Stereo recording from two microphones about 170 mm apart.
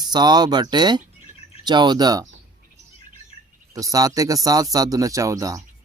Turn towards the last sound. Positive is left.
turn(degrees=-20)  # may be behind; listen again after turning